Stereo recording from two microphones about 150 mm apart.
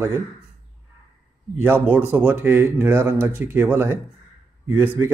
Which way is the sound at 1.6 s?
15° right (ahead or behind).